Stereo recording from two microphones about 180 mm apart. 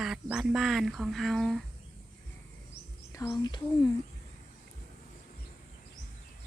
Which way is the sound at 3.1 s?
20° left (ahead or behind).